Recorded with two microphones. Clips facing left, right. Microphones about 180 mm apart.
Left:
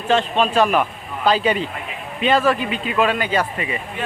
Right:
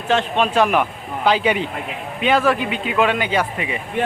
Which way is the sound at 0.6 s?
15° right (ahead or behind).